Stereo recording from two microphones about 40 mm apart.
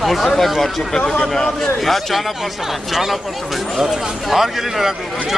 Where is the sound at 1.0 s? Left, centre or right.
Left.